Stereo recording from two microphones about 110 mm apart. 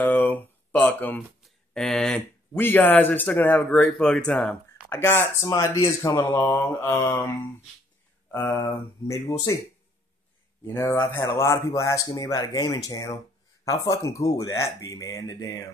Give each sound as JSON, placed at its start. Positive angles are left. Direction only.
{"t": 0.0, "sound": "a sound", "side_deg": 15}
{"t": 1.4, "sound": "a sound", "side_deg": 5}
{"t": 2.5, "sound": "speech", "side_deg": 20}
{"t": 4.9, "sound": "speech", "side_deg": 20}
{"t": 8.3, "sound": "speech", "side_deg": 20}
{"t": 10.6, "sound": "speech", "side_deg": 25}